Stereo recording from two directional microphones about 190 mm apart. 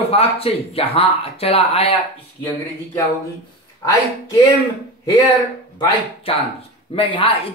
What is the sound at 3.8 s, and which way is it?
Speech, 15° left (ahead or behind).